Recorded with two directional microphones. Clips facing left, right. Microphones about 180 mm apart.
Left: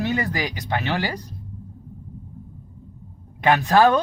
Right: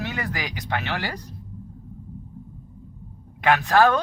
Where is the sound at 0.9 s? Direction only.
15° left (ahead or behind).